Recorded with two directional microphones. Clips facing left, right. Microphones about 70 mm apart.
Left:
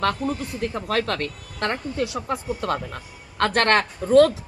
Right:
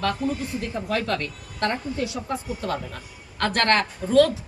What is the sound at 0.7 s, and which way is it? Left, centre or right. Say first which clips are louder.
A woman's voice: left 1 dB; left.